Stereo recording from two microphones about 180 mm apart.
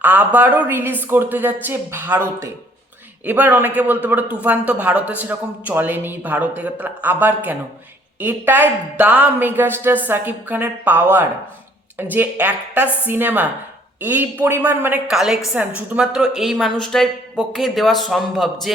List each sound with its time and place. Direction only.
0.0 s a woman's voice: 10° right (ahead or behind)